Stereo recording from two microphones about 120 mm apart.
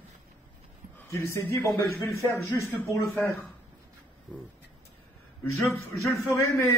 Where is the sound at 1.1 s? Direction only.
25° left (ahead or behind).